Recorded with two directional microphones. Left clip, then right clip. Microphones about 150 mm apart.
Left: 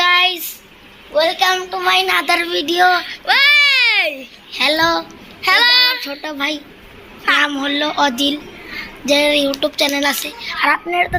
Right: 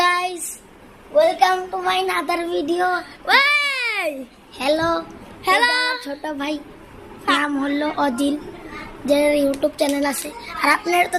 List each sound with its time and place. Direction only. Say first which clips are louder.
0.0 s a sound: left 6 dB; 10° right (ahead or behind)
1.1 s a child's voice: left 1 dB; 15° left (ahead or behind)
3.2 s baby cry: left 5 dB; 25° right (ahead or behind)
4.5 s a woman's voice: left 5 dB; 10° left (ahead or behind)
5.4 s a child's voice: left 4 dB; 25° right (ahead or behind)
5.7 s child singing: left 7 dB; 45° right (ahead or behind)
6.0 s speech: left 5 dB; 5° left (ahead or behind)
9.0 s a woman's voice: left 3 dB; 10° left (ahead or behind)
10.4 s a woman's voice: left 2 dB; 15° right (ahead or behind)